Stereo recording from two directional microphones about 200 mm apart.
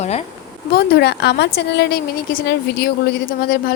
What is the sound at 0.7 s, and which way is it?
A woman's voice, 55° left (ahead or behind).